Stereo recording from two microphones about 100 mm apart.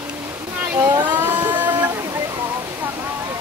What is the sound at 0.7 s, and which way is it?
Speech, 20° right (ahead or behind).